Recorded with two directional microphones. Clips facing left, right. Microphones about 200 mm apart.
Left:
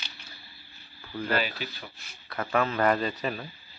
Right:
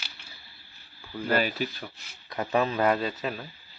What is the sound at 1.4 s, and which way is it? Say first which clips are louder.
Speech: right 4 dB; 45° right (ahead or behind).